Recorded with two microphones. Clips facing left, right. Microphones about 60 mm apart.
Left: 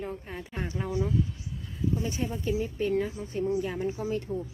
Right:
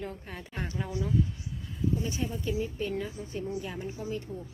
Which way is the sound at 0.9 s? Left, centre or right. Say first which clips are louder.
Left 1 dB; left.